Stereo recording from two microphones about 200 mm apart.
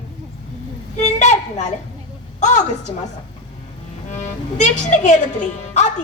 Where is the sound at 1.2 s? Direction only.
35° left (ahead or behind).